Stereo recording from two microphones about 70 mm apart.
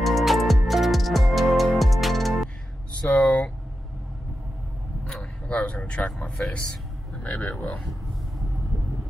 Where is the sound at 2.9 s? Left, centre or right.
Centre.